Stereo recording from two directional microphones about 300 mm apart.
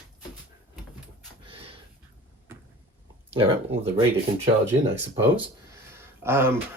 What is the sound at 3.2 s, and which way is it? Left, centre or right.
Speech, centre.